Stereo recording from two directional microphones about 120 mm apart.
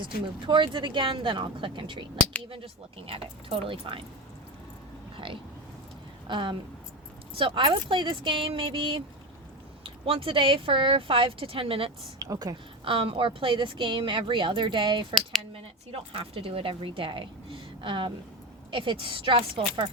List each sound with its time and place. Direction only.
0.0 s a woman's voice: 40° right (ahead or behind)
3.1 s a woman's voice: 50° right (ahead or behind)
5.1 s a woman's voice: 45° right (ahead or behind)
12.2 s speech: 30° right (ahead or behind)
12.8 s a woman's voice: 50° right (ahead or behind)
15.5 s a woman's voice: 50° right (ahead or behind)